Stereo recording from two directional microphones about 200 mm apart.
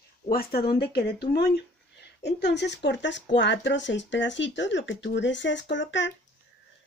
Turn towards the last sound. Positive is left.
turn(degrees=65)  # may be behind; listen again after turning